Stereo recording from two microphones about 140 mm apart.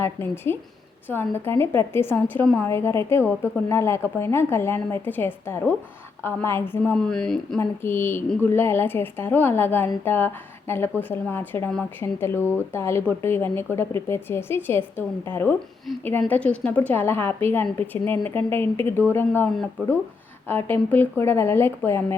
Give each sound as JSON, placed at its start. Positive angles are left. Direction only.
{"t": 0.0, "sound": "a woman's voice", "side_deg": 15}
{"t": 6.9, "sound": "speech", "side_deg": 5}
{"t": 7.6, "sound": "a woman's voice", "side_deg": 15}
{"t": 20.5, "sound": "a woman's voice", "side_deg": 15}